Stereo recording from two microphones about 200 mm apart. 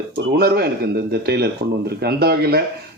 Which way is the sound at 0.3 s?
50° right (ahead or behind).